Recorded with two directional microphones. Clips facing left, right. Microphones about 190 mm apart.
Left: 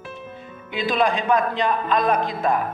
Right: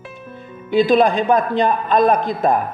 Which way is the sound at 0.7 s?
40° right (ahead or behind).